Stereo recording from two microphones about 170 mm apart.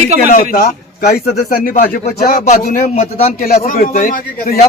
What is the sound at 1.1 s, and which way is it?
Speech, 40° left (ahead or behind).